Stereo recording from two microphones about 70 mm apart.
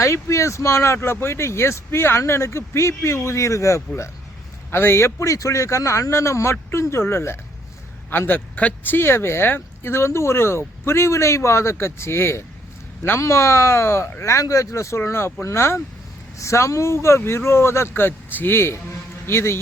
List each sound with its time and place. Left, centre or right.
0.0 s speech: left
8.5 s speech: left
9.0 s speech: left